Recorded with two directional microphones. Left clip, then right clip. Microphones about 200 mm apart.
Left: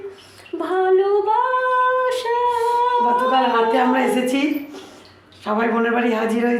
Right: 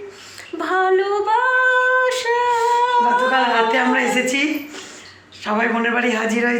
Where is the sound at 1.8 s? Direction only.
5° left (ahead or behind).